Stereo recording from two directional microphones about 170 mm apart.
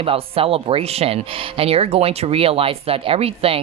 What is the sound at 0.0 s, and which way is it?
Speech, 35° right (ahead or behind).